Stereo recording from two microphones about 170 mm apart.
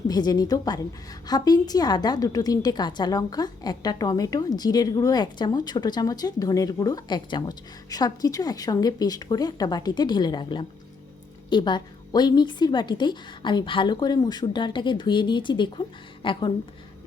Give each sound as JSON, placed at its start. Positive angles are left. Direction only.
{"t": 0.1, "sound": "a woman's voice", "side_deg": 25}